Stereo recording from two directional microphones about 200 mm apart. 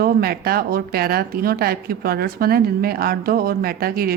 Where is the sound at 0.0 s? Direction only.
50° right (ahead or behind).